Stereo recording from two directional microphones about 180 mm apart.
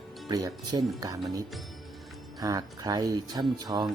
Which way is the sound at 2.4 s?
20° right (ahead or behind).